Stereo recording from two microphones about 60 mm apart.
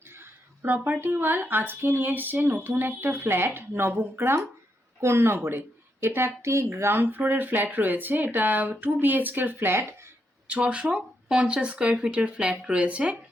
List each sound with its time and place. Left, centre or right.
0.2 s a woman's voice: right
6.7 s speech: right
10.5 s speech: centre